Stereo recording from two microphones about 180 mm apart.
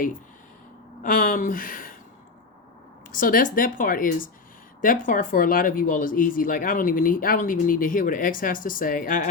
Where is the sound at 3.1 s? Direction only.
50° left (ahead or behind).